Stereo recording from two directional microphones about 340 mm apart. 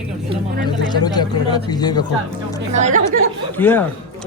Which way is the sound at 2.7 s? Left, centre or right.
Right.